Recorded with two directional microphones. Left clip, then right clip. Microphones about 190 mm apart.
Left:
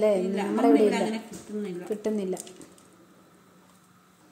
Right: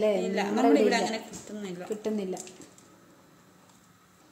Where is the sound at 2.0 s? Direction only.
15° left (ahead or behind).